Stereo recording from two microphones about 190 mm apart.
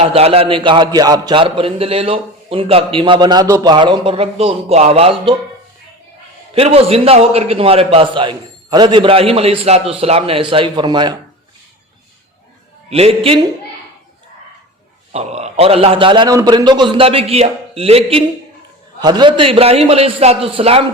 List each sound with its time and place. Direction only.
0.0 s a man's voice: 30° right (ahead or behind)
6.5 s a man's voice: 30° right (ahead or behind)
12.9 s a man's voice: 30° right (ahead or behind)
15.1 s a man's voice: 35° right (ahead or behind)